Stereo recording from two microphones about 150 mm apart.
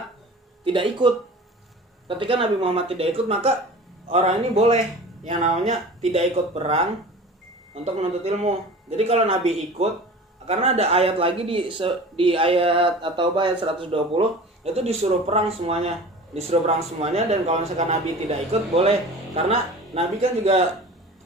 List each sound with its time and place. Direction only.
0.6 s a man's voice: 35° right (ahead or behind)
7.9 s a man's voice: 45° right (ahead or behind)